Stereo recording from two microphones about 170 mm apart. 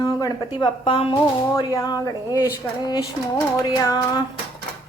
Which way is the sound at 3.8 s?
25° left (ahead or behind).